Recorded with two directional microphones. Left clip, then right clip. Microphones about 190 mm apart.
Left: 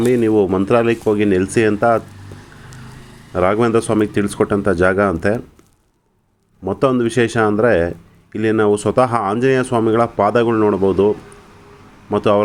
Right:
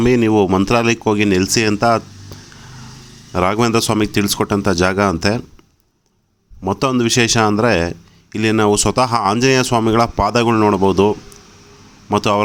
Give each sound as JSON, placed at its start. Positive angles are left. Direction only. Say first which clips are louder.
{"t": 0.0, "sound": "speech", "louder": "even", "side_deg": -75}
{"t": 3.3, "sound": "speech", "louder": "left 1 dB", "side_deg": -75}
{"t": 6.7, "sound": "speech", "louder": "even", "side_deg": -70}